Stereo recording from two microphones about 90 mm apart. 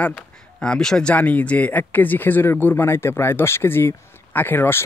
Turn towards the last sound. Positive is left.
turn(degrees=25)  # may be behind; listen again after turning